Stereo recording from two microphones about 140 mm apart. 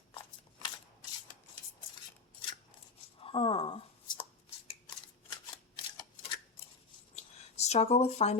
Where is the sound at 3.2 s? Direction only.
40° left (ahead or behind).